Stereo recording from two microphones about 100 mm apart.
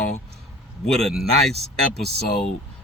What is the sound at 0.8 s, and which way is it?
Speech, centre (ahead or behind).